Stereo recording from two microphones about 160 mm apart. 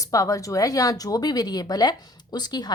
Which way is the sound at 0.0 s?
20° left (ahead or behind).